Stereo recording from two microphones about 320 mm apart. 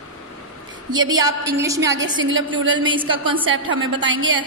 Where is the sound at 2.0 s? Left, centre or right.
Right.